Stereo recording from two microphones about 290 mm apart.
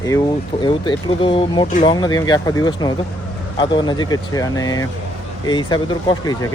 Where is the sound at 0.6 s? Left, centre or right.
Centre.